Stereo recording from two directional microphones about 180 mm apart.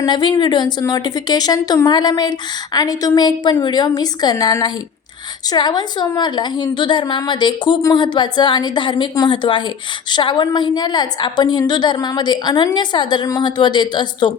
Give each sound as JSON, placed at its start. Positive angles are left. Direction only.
{"t": 0.0, "sound": "a woman's voice", "side_deg": 25}